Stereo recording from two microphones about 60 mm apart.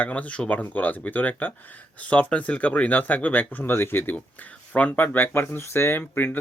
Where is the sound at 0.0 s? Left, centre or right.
Left.